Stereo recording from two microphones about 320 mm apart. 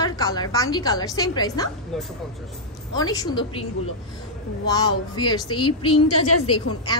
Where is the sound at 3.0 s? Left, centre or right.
Centre.